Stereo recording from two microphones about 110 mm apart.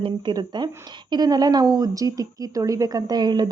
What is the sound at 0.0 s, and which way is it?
A woman's voice, 45° right (ahead or behind).